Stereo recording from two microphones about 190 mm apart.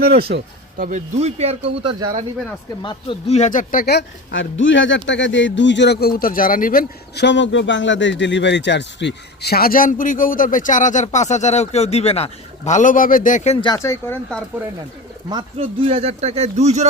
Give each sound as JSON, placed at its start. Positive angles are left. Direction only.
{"t": 0.3, "sound": "speech", "side_deg": -50}
{"t": 2.8, "sound": "speech", "side_deg": 25}
{"t": 13.7, "sound": "speech", "side_deg": 15}
{"t": 15.5, "sound": "speech", "side_deg": -30}